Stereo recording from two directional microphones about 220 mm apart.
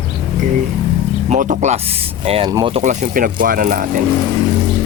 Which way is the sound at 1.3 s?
35° right (ahead or behind).